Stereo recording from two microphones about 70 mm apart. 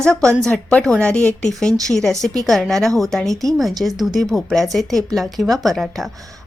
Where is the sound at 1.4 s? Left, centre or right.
Centre.